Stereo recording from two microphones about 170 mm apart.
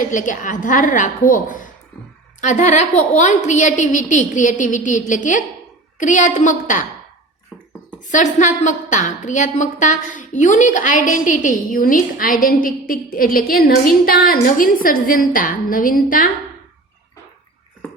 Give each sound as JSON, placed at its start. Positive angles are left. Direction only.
{"t": 0.0, "sound": "a woman's voice", "side_deg": 50}
{"t": 8.1, "sound": "a woman's voice", "side_deg": 45}